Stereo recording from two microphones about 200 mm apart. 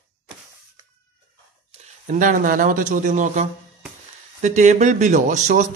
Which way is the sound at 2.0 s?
40° right (ahead or behind).